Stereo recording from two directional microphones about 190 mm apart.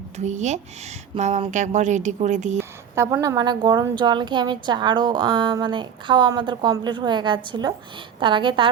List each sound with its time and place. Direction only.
0.2 s speech: 40° right (ahead or behind)
2.6 s a woman's voice: 15° right (ahead or behind)